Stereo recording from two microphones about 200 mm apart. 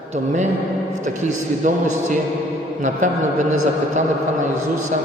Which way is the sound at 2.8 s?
40° right (ahead or behind).